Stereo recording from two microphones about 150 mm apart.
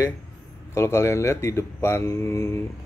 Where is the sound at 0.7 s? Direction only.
20° left (ahead or behind).